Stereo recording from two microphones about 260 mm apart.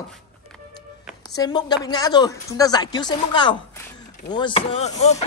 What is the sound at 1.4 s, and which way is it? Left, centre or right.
A woman's voice, centre.